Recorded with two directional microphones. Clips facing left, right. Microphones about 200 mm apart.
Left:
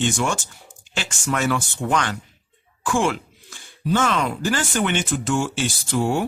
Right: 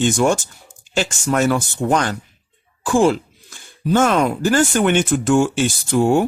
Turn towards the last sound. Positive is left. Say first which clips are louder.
# right 6 dB
turn(degrees=-45)  # may be behind; listen again after turning